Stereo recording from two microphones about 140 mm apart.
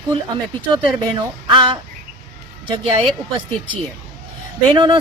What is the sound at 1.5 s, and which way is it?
Speech, 35° right (ahead or behind).